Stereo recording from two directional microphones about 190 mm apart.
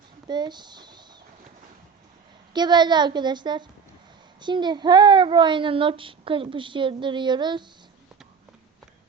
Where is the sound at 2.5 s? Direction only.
20° right (ahead or behind).